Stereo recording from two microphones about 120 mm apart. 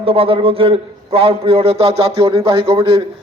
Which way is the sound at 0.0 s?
50° right (ahead or behind).